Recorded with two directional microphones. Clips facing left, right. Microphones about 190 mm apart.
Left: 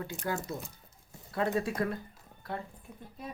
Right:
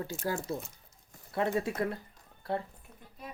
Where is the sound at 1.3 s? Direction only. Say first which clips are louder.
Even; 25° right (ahead or behind).